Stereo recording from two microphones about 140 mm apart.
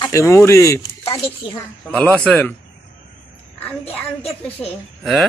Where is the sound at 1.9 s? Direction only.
10° left (ahead or behind).